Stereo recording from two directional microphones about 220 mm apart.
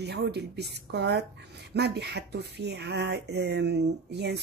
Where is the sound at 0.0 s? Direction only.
50° right (ahead or behind).